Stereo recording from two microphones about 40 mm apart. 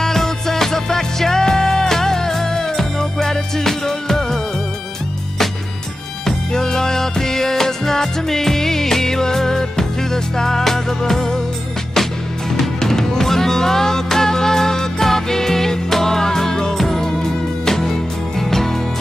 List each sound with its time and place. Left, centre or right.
0.0 s music: centre
6.2 s music: centre